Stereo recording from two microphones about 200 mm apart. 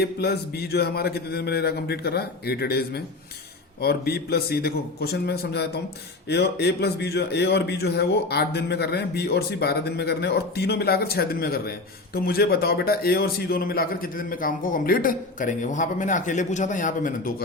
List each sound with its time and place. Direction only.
0.0 s a man's voice: 55° left (ahead or behind)